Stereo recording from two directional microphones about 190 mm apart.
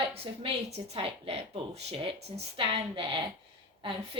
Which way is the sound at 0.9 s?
30° right (ahead or behind).